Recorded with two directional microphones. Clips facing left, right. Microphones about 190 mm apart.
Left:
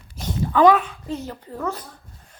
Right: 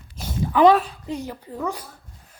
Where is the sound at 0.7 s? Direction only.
35° right (ahead or behind).